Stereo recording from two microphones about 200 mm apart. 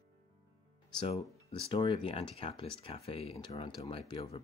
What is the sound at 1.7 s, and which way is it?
Speech, 25° left (ahead or behind).